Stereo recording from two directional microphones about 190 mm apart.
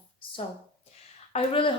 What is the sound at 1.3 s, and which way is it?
Speech, 30° left (ahead or behind).